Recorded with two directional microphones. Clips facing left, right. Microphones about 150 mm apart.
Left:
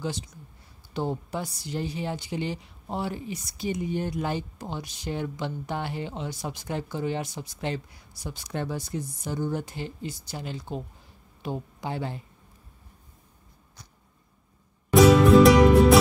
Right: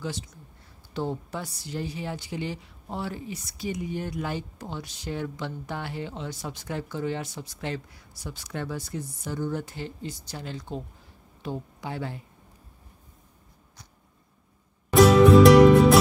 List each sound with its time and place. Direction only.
0.9 s a woman's voice: 15° left (ahead or behind)
15.0 s music: centre (ahead or behind)